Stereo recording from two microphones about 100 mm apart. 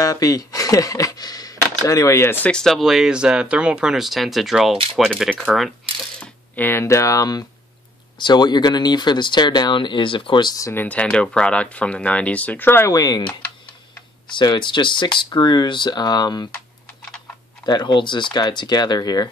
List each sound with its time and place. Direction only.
0.0 s speech: 35° left (ahead or behind)
2.4 s speech: 5° left (ahead or behind)
6.1 s speech: 20° left (ahead or behind); by 10.6 s 50° left (ahead or behind)
10.6 s speech: 20° left (ahead or behind)
12.9 s speech: 35° left (ahead or behind)
14.2 s speech: 50° left (ahead or behind)
17.6 s speech: 45° left (ahead or behind)